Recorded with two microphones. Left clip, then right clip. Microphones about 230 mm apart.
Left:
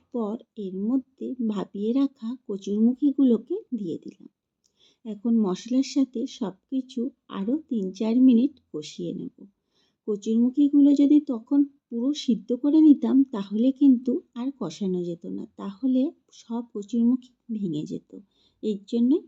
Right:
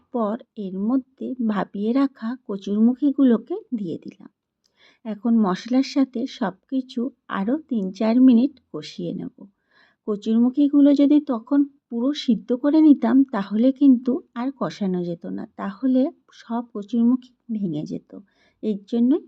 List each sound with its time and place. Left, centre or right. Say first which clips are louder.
0.1 s speech: right 6 dB; centre